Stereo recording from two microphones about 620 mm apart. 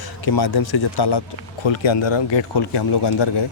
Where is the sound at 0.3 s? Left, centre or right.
Left.